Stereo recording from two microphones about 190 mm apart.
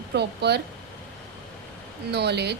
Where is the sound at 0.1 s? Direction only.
60° right (ahead or behind).